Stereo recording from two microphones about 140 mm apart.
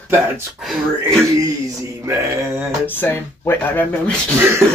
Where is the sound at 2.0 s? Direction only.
20° right (ahead or behind).